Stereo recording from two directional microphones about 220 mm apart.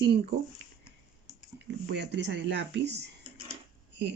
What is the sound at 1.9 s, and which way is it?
Speech, 50° right (ahead or behind).